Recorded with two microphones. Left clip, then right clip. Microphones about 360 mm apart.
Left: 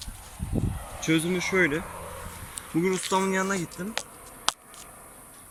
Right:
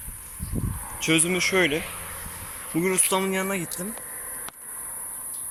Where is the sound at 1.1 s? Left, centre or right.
Right.